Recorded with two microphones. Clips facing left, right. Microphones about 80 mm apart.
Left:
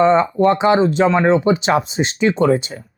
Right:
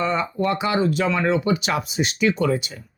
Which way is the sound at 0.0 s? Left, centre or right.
Left.